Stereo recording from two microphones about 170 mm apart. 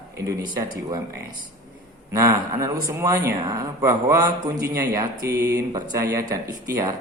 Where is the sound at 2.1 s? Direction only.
20° right (ahead or behind).